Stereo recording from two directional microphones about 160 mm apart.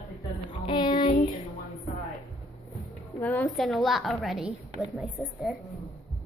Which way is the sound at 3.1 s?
10° left (ahead or behind).